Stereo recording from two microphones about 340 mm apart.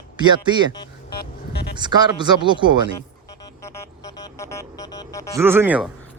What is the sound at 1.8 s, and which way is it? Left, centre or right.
Speech, centre.